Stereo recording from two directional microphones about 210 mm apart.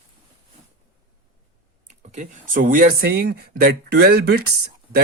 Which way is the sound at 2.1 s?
40° right (ahead or behind).